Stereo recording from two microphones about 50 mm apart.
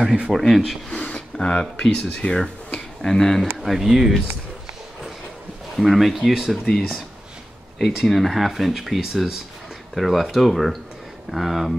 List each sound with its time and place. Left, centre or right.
0.3 s speech: centre
0.8 s speech: left
3.6 s speech: centre
5.8 s speech: centre
7.8 s speech: centre